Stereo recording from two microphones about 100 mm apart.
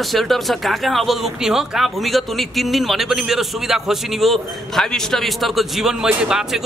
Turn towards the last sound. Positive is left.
turn(degrees=-5)  # may be behind; listen again after turning